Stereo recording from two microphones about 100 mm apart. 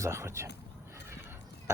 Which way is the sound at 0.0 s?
30° right (ahead or behind).